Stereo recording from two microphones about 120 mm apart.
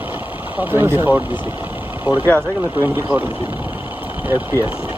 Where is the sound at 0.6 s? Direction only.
15° right (ahead or behind).